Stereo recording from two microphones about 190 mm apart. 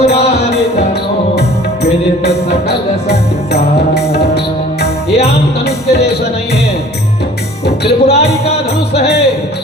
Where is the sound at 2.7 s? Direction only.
60° left (ahead or behind).